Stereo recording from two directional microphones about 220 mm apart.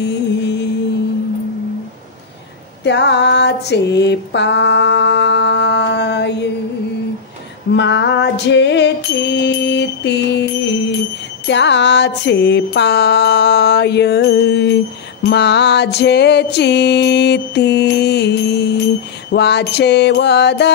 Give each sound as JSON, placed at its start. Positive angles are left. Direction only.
{"t": 0.0, "sound": "music", "side_deg": 50}
{"t": 2.8, "sound": "mantra", "side_deg": 50}
{"t": 7.7, "sound": "music", "side_deg": 55}